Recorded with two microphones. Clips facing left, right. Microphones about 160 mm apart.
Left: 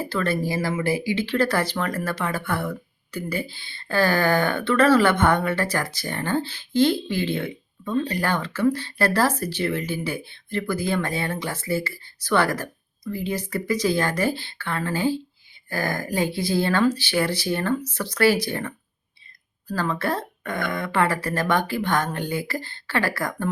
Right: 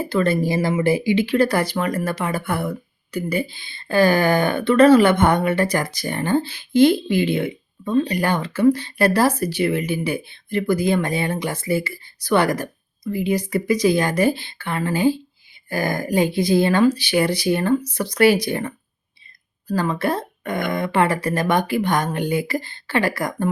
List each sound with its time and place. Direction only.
0.0 s speech: 15° right (ahead or behind)